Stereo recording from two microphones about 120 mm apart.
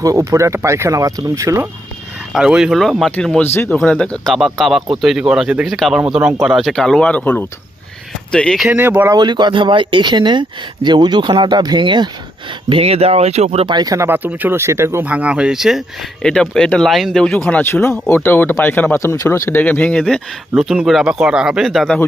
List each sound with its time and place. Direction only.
0.0 s speech: 30° right (ahead or behind)
2.3 s speech: 5° right (ahead or behind)
3.5 s speech: 20° left (ahead or behind)
3.8 s speech: 5° left (ahead or behind)
8.6 s speech: 15° right (ahead or behind)
9.1 s speech: 40° right (ahead or behind)
12.6 s speech: 50° right (ahead or behind)
13.7 s speech: 35° right (ahead or behind)
14.1 s speech: 15° right (ahead or behind)
16.2 s speech: 5° left (ahead or behind)
17.7 s speech: 20° left (ahead or behind); by 21.9 s centre (ahead or behind)